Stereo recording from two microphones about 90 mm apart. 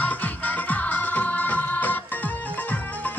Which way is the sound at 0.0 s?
15° left (ahead or behind).